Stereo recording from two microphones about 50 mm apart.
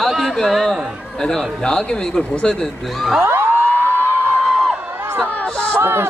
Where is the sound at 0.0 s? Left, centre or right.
Centre.